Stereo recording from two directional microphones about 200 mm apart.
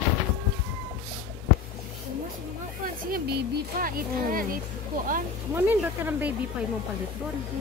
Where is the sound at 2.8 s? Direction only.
45° right (ahead or behind).